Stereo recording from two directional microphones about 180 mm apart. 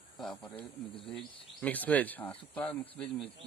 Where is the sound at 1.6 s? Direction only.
10° left (ahead or behind).